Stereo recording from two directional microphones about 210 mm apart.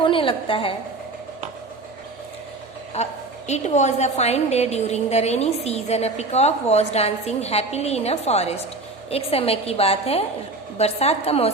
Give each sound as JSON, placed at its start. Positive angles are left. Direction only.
{"t": 0.0, "sound": "a woman's voice", "side_deg": 25}
{"t": 2.9, "sound": "a woman's voice", "side_deg": 30}